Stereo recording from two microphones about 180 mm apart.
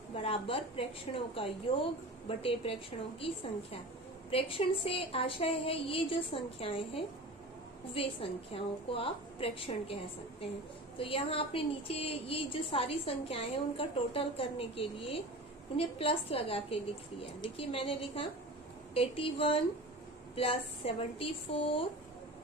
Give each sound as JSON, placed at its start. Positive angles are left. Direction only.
{"t": 0.1, "sound": "a woman's voice", "side_deg": 30}